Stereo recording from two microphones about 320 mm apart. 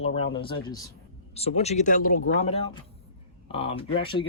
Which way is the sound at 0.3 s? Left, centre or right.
Centre.